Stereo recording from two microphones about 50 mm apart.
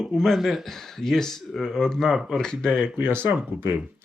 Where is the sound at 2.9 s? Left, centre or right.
Right.